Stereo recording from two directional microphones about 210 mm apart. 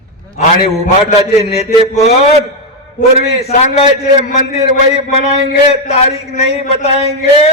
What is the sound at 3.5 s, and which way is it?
A man's voice, 30° left (ahead or behind).